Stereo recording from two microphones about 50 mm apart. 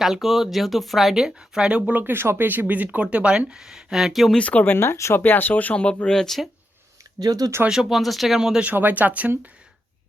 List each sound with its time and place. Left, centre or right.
0.0 s speech: centre
1.9 s speech: right
2.5 s speech: right; by 4.4 s centre
4.4 s speech: left
4.6 s speech: left
5.1 s speech: left
5.7 s speech: left
7.7 s speech: centre
8.7 s speech: right